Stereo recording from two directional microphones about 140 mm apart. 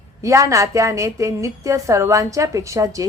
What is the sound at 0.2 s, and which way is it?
A woman's voice, 20° right (ahead or behind).